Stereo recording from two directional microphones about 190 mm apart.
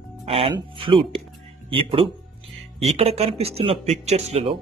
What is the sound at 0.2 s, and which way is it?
Speech, 30° right (ahead or behind).